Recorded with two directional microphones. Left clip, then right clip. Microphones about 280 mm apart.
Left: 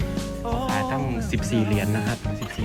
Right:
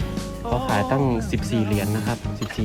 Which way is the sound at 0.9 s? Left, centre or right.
Centre.